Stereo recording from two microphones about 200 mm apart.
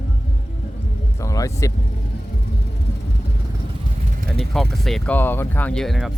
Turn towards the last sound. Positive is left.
turn(degrees=0)  # may be behind; listen again after turning